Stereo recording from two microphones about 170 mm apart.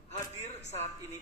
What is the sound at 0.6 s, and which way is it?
Speech, 40° left (ahead or behind).